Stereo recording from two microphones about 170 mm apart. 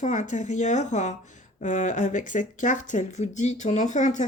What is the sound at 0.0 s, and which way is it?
Speech, 45° left (ahead or behind).